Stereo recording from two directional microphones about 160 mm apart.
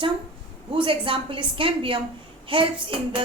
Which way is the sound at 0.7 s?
35° right (ahead or behind).